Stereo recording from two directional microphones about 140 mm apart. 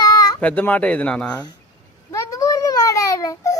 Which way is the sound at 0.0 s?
25° left (ahead or behind).